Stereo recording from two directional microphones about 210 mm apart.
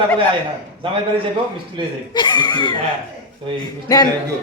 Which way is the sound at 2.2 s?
20° left (ahead or behind).